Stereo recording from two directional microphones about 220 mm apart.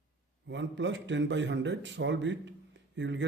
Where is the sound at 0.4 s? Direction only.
55° right (ahead or behind).